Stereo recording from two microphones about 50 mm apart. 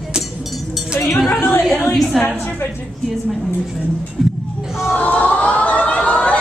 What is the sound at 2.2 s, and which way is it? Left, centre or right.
Speech, centre.